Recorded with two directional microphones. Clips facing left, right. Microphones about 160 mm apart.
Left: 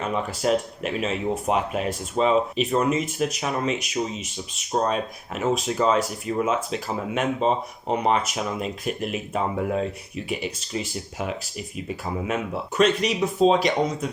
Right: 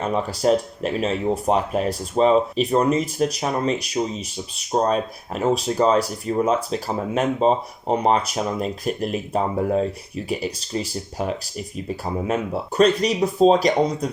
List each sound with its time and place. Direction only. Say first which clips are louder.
0.0 s speech: right 4 dB; 35° right (ahead or behind)